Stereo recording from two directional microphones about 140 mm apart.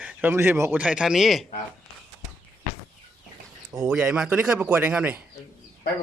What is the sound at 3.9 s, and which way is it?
Speech, 5° right (ahead or behind).